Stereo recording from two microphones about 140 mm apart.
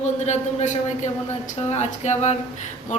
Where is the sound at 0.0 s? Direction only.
55° left (ahead or behind).